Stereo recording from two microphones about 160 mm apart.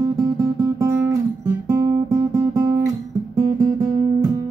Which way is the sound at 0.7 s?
20° right (ahead or behind).